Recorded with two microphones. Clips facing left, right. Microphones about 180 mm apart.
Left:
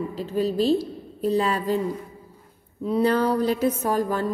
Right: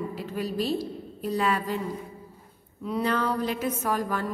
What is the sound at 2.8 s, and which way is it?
Speech, 35° left (ahead or behind).